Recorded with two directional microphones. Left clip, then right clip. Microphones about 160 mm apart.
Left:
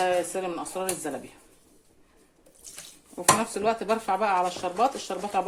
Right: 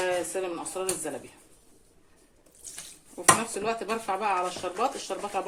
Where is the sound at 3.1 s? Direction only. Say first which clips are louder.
Even; 40° left (ahead or behind).